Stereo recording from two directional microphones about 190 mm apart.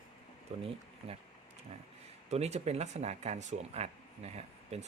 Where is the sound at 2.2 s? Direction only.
35° right (ahead or behind).